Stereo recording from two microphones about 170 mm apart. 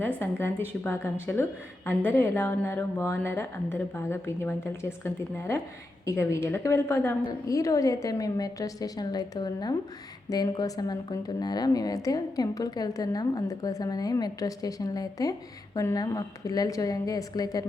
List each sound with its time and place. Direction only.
0.0 s a woman's voice: 10° left (ahead or behind)